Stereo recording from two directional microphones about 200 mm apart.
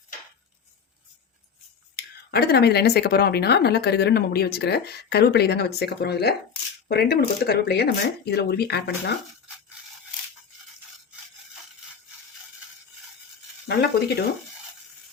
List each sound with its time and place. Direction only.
2.0 s speech: 55° left (ahead or behind)
13.7 s speech: 55° left (ahead or behind)